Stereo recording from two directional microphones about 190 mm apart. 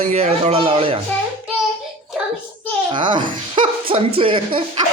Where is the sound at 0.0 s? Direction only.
35° right (ahead or behind).